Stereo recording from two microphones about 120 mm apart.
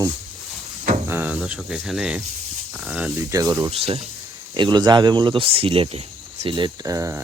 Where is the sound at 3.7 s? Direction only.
55° right (ahead or behind).